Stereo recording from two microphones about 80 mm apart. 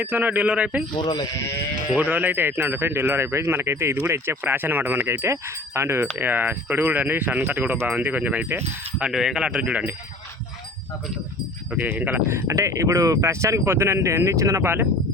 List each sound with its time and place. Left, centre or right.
0.0 s speech: right
0.9 s speech: left
2.0 s speech: right
9.0 s speech: centre
11.8 s speech: right
12.3 s speech: right